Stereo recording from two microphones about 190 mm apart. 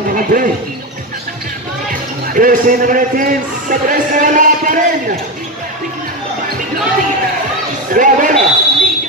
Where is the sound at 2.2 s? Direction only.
45° right (ahead or behind).